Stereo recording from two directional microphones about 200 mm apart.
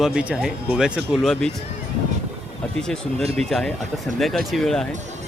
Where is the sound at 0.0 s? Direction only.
5° right (ahead or behind).